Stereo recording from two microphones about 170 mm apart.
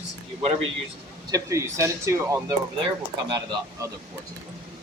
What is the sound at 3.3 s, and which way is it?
Speech, 25° right (ahead or behind).